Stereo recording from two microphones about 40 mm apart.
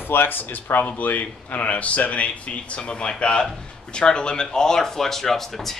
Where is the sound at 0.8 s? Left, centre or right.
Left; by 5.8 s centre.